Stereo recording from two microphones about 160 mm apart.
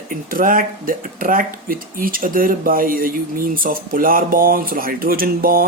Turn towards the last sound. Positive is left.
turn(degrees=-65)  # may be behind; listen again after turning